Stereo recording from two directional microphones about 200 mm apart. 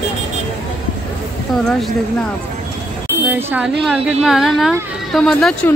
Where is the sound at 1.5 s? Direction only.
Centre (ahead or behind).